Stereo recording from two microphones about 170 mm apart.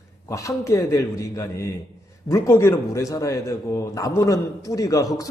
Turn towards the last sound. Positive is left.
turn(degrees=20)  # may be behind; listen again after turning